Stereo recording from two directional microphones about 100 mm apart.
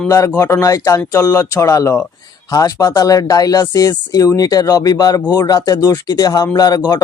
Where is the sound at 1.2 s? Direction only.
25° left (ahead or behind); by 7.0 s 40° left (ahead or behind).